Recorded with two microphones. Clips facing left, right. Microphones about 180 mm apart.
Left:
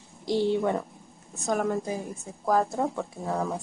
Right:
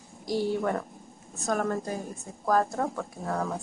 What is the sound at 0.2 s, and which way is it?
Speech, 25° left (ahead or behind).